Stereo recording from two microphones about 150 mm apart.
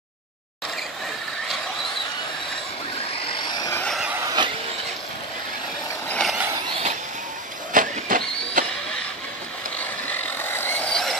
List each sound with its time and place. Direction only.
3.3 s vehicle: 30° left (ahead or behind)
3.7 s vehicle: 5° left (ahead or behind)
4.2 s vehicle: 25° right (ahead or behind)
6.0 s vehicle: 5° left (ahead or behind)
6.3 s vehicle: 15° right (ahead or behind)
6.7 s vehicle: 45° right (ahead or behind)
7.7 s vehicle: 65° right (ahead or behind)
10.0 s vehicle: 10° left (ahead or behind)